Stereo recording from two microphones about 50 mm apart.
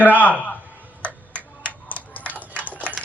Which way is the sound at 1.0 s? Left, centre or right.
Left.